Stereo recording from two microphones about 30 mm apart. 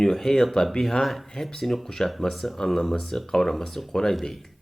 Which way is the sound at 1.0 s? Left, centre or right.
Centre.